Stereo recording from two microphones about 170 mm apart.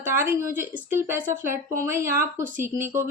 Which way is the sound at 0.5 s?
15° right (ahead or behind).